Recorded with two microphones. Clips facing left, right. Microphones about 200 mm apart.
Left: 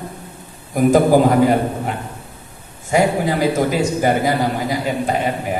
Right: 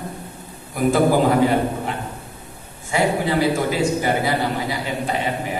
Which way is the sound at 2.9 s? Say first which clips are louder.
Left 3 dB; 45° left (ahead or behind).